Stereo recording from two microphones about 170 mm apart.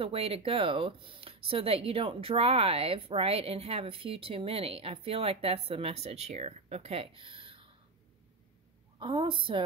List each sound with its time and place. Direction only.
0.0 s speech: 35° right (ahead or behind)
9.0 s speech: 30° right (ahead or behind)